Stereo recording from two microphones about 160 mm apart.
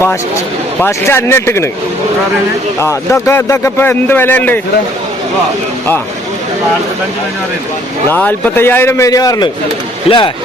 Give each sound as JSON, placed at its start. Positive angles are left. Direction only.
{"t": 0.8, "sound": "speech", "side_deg": 15}
{"t": 2.8, "sound": "speech", "side_deg": 15}
{"t": 8.1, "sound": "speech", "side_deg": 10}